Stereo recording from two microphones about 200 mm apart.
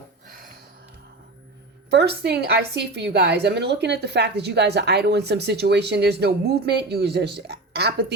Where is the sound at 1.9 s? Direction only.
55° right (ahead or behind).